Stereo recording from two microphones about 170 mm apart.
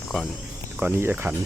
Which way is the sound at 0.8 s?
15° right (ahead or behind).